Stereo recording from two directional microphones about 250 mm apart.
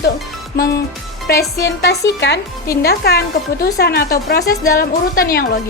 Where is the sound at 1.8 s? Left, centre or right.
Left.